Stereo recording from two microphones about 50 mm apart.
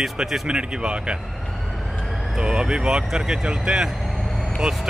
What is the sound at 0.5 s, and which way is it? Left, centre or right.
Speech, centre.